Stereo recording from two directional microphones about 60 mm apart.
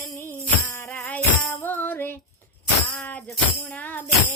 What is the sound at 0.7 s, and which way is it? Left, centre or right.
Music, left.